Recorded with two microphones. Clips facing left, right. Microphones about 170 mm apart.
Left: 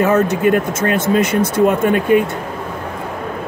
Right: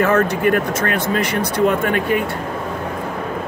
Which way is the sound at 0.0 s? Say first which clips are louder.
Left 2 dB; 20° left (ahead or behind).